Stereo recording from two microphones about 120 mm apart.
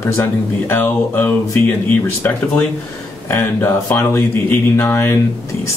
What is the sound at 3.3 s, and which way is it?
Speech, 20° left (ahead or behind).